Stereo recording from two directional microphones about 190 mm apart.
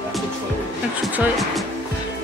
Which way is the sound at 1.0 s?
5° right (ahead or behind).